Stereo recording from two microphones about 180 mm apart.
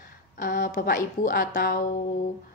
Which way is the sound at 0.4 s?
50° left (ahead or behind).